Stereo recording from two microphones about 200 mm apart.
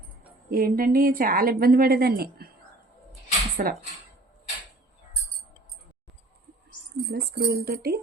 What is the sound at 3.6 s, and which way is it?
Speech, 45° right (ahead or behind).